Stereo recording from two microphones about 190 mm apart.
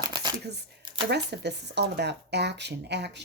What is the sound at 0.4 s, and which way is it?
Shuffling cards, 60° right (ahead or behind).